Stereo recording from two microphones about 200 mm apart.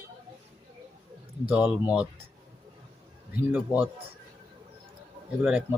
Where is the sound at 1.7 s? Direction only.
5° right (ahead or behind).